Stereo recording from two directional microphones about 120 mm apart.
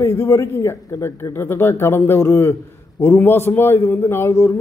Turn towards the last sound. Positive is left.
turn(degrees=20)  # may be behind; listen again after turning